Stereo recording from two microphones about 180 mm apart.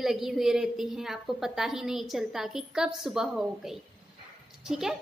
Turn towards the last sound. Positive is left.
turn(degrees=0)  # may be behind; listen again after turning